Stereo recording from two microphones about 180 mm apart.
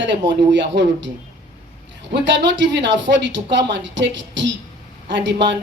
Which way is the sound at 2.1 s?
85° right.